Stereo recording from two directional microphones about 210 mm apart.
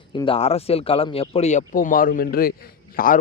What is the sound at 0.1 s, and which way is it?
A man's voice, 25° left (ahead or behind).